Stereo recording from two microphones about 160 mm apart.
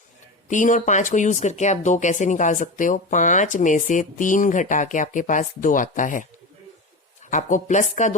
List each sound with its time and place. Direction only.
0.5 s speech: 50° left (ahead or behind)
7.3 s speech: 50° left (ahead or behind)